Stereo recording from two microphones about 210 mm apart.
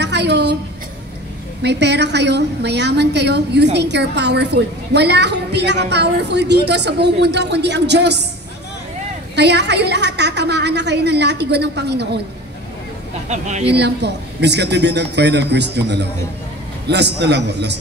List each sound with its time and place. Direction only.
0.0 s a sound: 55° right (ahead or behind)
1.6 s a woman's voice: 55° right (ahead or behind)
9.3 s a woman's voice: 55° right (ahead or behind)
13.3 s speech: 35° right (ahead or behind)
13.7 s a woman's voice: 55° right (ahead or behind)